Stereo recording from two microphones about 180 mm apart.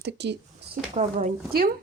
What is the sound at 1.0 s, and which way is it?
Speech, 40° right (ahead or behind).